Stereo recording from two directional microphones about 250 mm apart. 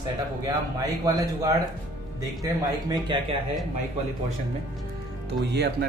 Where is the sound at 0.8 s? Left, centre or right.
Centre.